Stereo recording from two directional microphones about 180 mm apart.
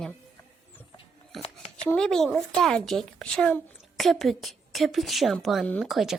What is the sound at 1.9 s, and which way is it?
A woman's voice, 5° left (ahead or behind).